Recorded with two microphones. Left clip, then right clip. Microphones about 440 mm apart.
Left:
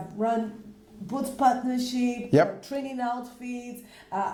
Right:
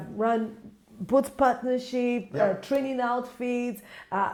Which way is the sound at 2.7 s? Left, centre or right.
Right.